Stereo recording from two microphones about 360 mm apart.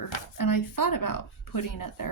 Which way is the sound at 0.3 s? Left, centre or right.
Left.